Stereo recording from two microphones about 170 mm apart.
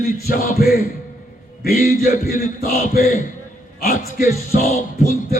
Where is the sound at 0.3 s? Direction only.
60° left (ahead or behind).